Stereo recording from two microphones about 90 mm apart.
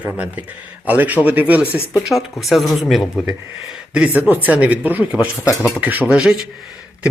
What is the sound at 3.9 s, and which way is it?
Speech, 15° right (ahead or behind).